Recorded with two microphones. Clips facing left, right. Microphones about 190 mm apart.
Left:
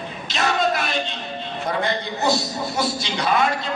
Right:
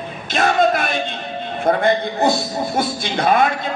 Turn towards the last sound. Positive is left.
turn(degrees=-50)  # may be behind; listen again after turning